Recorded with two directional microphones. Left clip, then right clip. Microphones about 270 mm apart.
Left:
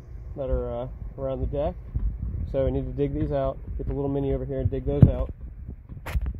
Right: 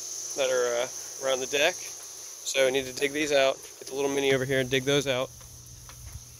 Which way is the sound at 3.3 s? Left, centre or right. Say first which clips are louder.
Right 4 dB; right.